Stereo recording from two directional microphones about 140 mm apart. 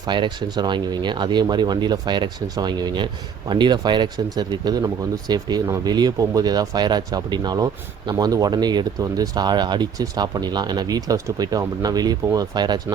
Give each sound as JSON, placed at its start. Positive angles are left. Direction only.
{"t": 0.0, "sound": "speech", "side_deg": -35}